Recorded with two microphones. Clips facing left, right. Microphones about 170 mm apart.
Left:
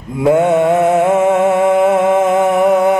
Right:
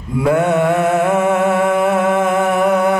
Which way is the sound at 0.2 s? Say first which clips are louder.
Left 3 dB; 20° left (ahead or behind).